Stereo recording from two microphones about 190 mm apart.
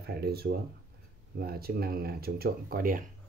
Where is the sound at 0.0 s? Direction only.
55° right (ahead or behind).